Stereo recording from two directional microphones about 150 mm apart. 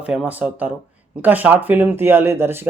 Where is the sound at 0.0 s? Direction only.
5° right (ahead or behind).